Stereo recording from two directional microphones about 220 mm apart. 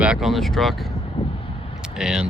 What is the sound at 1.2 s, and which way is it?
Vehicle, 20° left (ahead or behind).